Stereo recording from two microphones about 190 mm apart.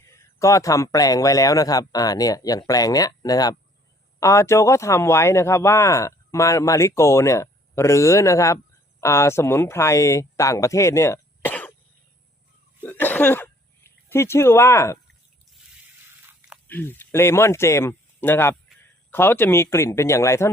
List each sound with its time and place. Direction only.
0.0 s speech: 15° left (ahead or behind)
12.8 s throat clearing: 10° left (ahead or behind)
16.6 s speech: 10° left (ahead or behind)